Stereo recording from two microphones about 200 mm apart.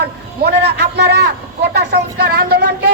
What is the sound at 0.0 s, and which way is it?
A man's voice, 55° right (ahead or behind).